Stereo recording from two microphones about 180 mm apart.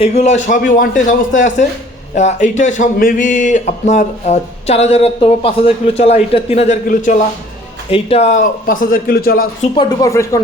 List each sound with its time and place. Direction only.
0.0 s a man's voice: 35° left (ahead or behind)
7.9 s a man's voice: 30° left (ahead or behind); by 9.5 s 55° left (ahead or behind)
9.7 s speech: 20° left (ahead or behind)